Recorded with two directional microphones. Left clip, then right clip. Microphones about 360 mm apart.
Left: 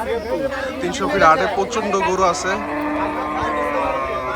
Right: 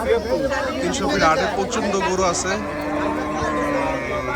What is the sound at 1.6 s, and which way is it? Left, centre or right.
Speech, centre.